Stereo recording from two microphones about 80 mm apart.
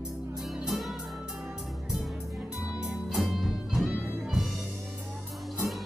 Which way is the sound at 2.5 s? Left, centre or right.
Centre.